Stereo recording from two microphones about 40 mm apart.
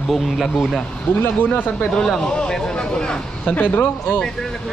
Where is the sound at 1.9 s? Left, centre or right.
Centre.